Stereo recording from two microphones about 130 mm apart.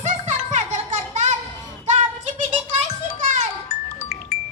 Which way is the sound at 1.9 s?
70° right (ahead or behind).